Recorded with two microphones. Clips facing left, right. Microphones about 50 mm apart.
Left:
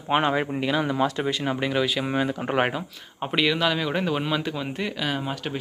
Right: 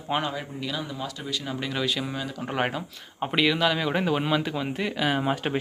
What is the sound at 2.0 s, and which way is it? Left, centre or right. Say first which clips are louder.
Speech: left 7 dB; left.